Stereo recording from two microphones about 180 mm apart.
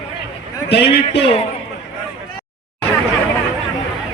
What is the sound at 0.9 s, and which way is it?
Speech, 30° left (ahead or behind).